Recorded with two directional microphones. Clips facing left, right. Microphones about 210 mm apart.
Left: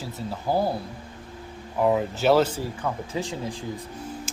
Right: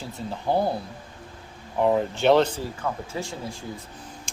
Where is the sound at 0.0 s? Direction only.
Centre (ahead or behind).